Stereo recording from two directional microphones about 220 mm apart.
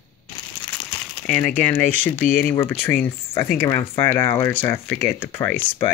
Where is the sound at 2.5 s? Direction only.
10° left (ahead or behind).